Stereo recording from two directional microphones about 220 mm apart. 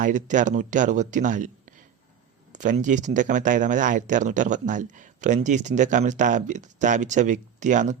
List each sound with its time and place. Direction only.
0.0 s speech: 35° right (ahead or behind)